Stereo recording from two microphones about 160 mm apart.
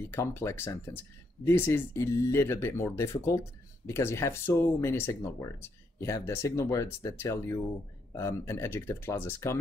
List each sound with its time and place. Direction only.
0.1 s speech: 15° left (ahead or behind)